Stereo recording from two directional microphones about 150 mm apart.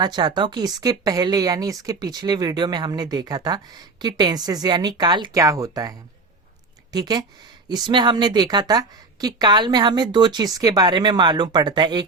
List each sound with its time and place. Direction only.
0.0 s a woman's voice: 30° right (ahead or behind)